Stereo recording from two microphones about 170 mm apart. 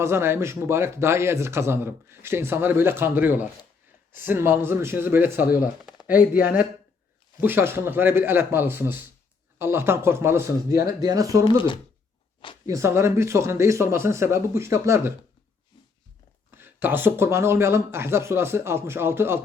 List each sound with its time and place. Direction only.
0.0 s a man's voice: 15° right (ahead or behind)
5.8 s a sound: 5° right (ahead or behind)
7.4 s a man's voice: 15° right (ahead or behind)
11.4 s speech: 30° left (ahead or behind)
12.6 s a man's voice: 15° right (ahead or behind)
16.5 s a man's voice: 10° right (ahead or behind)